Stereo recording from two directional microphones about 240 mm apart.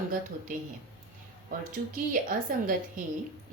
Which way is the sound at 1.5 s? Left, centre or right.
Right.